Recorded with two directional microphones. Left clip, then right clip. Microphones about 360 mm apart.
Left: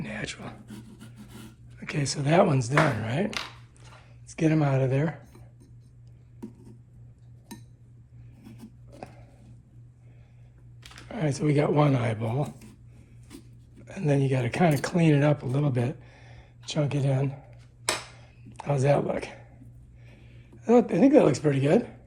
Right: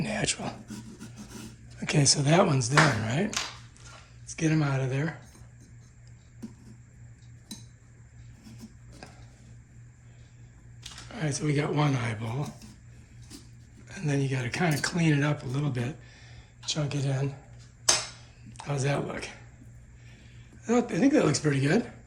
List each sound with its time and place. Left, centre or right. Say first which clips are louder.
0.0 s a sound: right 5 dB; centre
1.8 s speech: right 6 dB; centre
4.3 s speech: left 3 dB; centre
11.1 s speech: left 4 dB; centre
13.8 s speech: left 5 dB; centre
18.5 s speech: left 7 dB; centre
20.7 s speech: left 5 dB; centre